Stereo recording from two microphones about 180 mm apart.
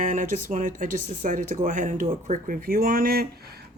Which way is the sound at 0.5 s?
45° right (ahead or behind).